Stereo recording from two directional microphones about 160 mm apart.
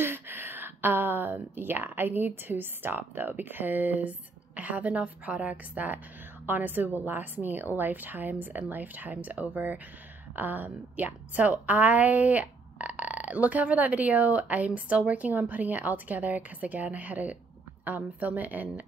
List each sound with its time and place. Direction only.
0.0 s a woman's voice: 15° right (ahead or behind)